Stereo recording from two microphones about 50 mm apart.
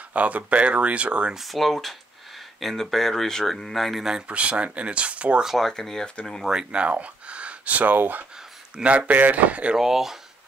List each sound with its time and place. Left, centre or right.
0.1 s speech: right
1.3 s speech: centre
4.3 s speech: right
5.6 s speech: centre
6.7 s speech: right
8.7 s speech: right
9.8 s speech: centre